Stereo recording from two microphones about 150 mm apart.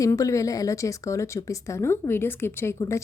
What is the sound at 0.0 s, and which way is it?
A woman's voice, 20° left (ahead or behind).